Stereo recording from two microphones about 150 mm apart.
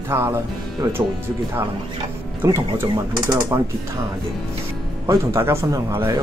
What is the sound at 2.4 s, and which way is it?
Speech, 20° right (ahead or behind).